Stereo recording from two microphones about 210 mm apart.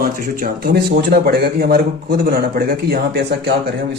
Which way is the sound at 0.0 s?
45° right (ahead or behind).